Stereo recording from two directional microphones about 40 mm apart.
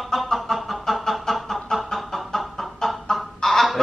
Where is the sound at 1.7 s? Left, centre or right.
Centre.